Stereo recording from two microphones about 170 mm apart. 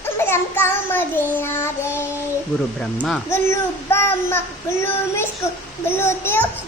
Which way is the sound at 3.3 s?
15° left (ahead or behind).